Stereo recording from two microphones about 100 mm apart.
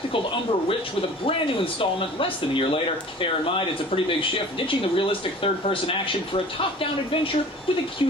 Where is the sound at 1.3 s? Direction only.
65° left (ahead or behind).